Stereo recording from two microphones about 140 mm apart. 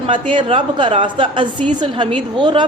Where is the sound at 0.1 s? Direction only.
35° right (ahead or behind).